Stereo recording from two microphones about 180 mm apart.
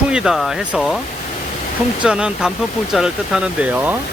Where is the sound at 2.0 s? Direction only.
5° right (ahead or behind).